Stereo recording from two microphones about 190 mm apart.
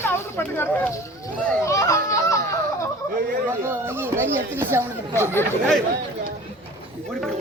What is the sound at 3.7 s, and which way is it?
Speech, 10° right (ahead or behind).